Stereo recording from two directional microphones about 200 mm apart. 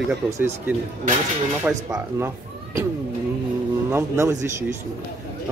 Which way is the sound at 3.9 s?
15° right (ahead or behind).